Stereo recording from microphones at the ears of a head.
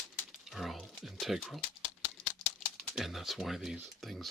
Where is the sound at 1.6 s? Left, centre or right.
Left.